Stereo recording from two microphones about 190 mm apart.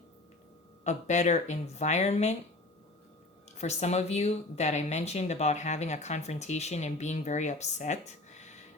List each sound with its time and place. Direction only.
0.9 s speech: 40° left (ahead or behind)
3.6 s speech: 35° left (ahead or behind)